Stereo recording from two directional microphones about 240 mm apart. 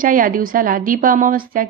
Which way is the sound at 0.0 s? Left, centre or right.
Right.